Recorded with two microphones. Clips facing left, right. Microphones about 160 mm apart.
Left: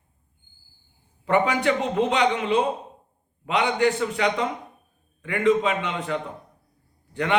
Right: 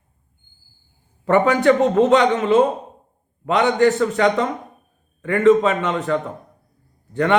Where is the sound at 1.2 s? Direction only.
45° right (ahead or behind).